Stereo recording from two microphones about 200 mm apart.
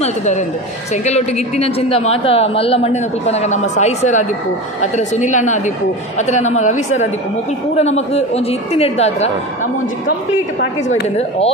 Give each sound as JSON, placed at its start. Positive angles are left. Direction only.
{"t": 0.0, "sound": "a man's voice", "side_deg": 35}
{"t": 10.9, "sound": "a man's voice", "side_deg": 30}